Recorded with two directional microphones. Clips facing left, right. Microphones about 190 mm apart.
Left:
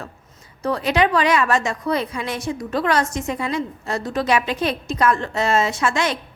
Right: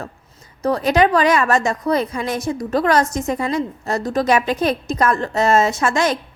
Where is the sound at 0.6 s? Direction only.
40° right (ahead or behind).